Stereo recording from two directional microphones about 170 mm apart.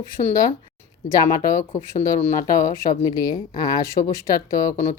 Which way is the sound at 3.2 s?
20° left (ahead or behind).